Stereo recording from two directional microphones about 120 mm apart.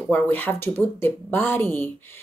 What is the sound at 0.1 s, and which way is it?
A woman's voice, 15° left (ahead or behind).